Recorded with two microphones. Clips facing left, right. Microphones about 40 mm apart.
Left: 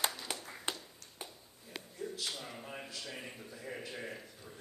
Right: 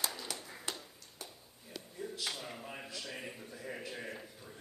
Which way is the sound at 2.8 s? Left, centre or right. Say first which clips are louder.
Right 1 dB; centre.